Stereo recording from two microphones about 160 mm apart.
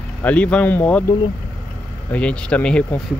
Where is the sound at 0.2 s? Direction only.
10° left (ahead or behind).